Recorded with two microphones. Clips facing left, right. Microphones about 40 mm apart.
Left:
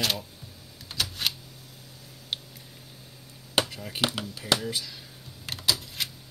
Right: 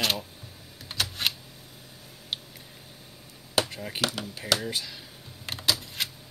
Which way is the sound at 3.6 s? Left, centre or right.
Centre.